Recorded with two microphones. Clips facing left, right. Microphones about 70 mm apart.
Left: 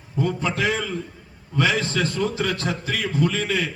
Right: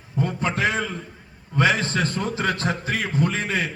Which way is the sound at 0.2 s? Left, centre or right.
Right.